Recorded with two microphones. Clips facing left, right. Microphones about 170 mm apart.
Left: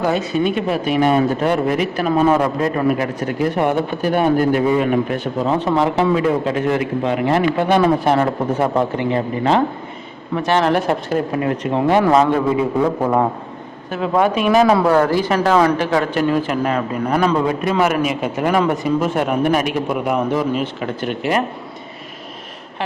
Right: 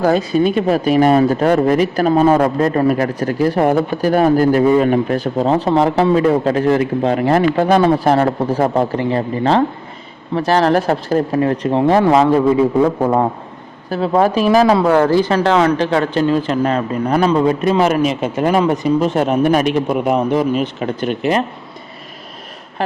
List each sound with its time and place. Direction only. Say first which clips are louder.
0.0 s speech: right 4 dB; 35° right (ahead or behind)
13.0 s a man's voice: right 2 dB; 15° right (ahead or behind)
13.9 s speech: right 3 dB; 35° right (ahead or behind)